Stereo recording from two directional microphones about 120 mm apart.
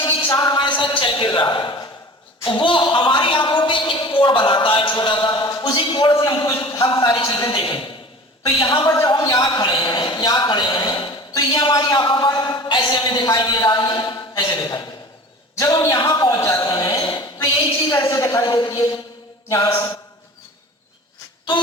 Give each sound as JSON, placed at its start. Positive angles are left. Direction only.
{"t": 0.0, "sound": "a woman's voice", "side_deg": 40}
{"t": 17.9, "sound": "a man's voice", "side_deg": 30}
{"t": 19.5, "sound": "mantra", "side_deg": 25}